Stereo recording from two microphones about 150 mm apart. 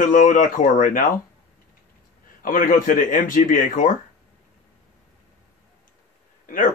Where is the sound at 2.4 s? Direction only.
70° left (ahead or behind).